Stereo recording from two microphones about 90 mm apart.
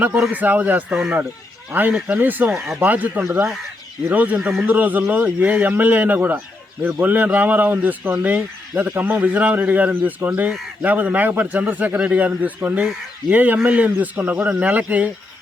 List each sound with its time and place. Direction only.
0.2 s a man's voice: 15° right (ahead or behind)
2.6 s speech: 5° right (ahead or behind)
2.8 s a man's voice: 20° right (ahead or behind)
3.3 s speech: 5° right (ahead or behind)
4.1 s a man's voice: 20° right (ahead or behind)
4.4 s speech: 5° right (ahead or behind)
4.6 s a man's voice: 20° right (ahead or behind)